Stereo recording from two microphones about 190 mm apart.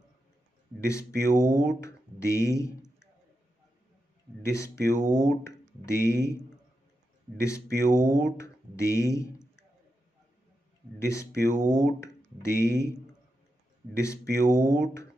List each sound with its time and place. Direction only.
0.8 s speech: 15° left (ahead or behind)
4.4 s speech: 15° left (ahead or behind)
7.3 s speech: 15° left (ahead or behind)
11.0 s speech: 15° left (ahead or behind)
13.9 s speech: 15° left (ahead or behind)